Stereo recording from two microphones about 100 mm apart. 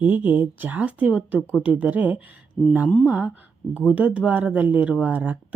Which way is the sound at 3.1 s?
15° right (ahead or behind).